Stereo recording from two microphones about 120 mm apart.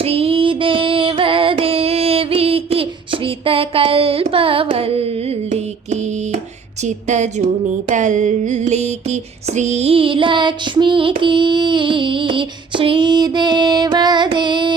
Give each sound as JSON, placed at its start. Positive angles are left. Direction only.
{"t": 0.0, "sound": "female singing", "side_deg": -55}
{"t": 6.8, "sound": "speech", "side_deg": -75}
{"t": 7.9, "sound": "a sound", "side_deg": -90}